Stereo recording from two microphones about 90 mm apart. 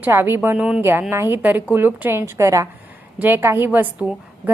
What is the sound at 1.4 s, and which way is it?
A woman's voice, 15° right (ahead or behind).